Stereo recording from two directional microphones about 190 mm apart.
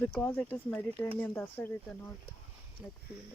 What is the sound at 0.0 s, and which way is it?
Speech, 5° left (ahead or behind).